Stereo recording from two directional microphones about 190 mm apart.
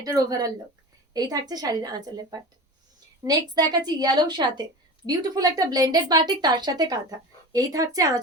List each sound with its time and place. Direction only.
0.0 s a woman's voice: 20° right (ahead or behind)